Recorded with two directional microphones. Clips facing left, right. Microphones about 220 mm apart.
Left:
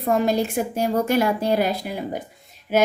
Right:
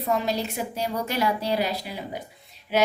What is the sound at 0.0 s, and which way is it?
A woman's voice, 50° left (ahead or behind).